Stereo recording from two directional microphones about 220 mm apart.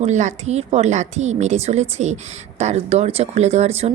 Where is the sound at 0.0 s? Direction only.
30° right (ahead or behind).